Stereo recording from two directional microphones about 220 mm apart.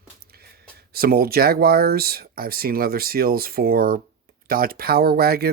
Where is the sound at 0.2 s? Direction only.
45° right (ahead or behind).